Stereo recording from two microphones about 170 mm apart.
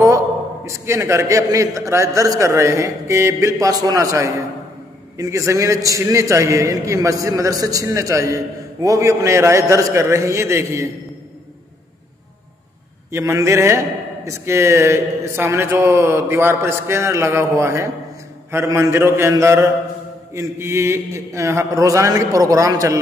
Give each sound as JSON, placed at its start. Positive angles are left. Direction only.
{"t": 0.7, "sound": "a man's voice", "side_deg": -15}
{"t": 13.1, "sound": "a man's voice", "side_deg": -15}